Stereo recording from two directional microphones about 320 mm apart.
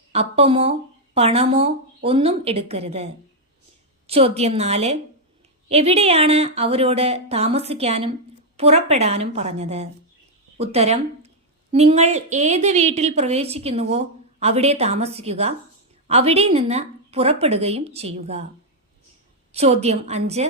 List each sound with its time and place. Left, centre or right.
0.1 s a woman's voice: centre
19.5 s a woman's voice: centre